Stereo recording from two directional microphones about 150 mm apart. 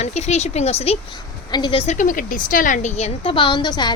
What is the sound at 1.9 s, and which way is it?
Speech, 60° left (ahead or behind).